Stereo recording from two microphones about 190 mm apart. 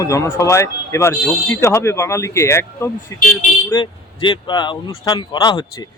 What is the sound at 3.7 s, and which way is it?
Speech, 25° left (ahead or behind).